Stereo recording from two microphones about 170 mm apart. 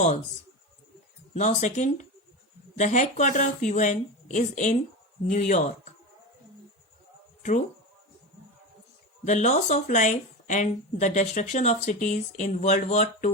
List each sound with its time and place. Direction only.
1.3 s speech: 45° left (ahead or behind)
9.2 s speech: 45° left (ahead or behind)